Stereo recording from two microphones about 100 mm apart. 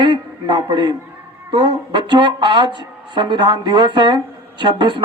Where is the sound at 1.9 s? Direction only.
45° right (ahead or behind).